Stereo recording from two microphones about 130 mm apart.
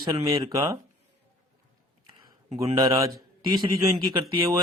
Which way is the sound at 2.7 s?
30° right (ahead or behind).